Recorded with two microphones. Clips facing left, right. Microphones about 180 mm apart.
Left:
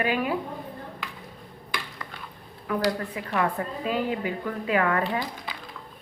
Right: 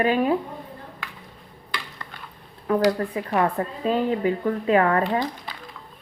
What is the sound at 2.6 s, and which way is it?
A woman's voice, 35° right (ahead or behind).